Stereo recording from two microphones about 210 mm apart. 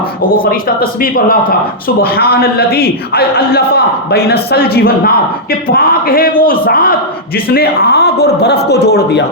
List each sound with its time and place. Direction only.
0.8 s a man's voice: 45° left (ahead or behind)